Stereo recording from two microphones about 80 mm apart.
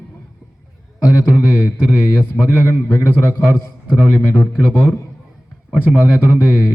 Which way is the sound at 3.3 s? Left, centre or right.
Centre.